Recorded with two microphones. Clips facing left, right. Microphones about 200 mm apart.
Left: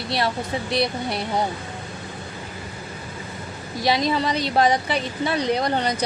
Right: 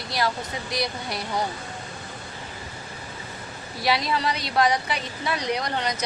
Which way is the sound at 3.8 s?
25° left (ahead or behind).